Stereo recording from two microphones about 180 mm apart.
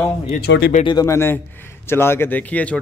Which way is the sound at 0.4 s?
65° left (ahead or behind).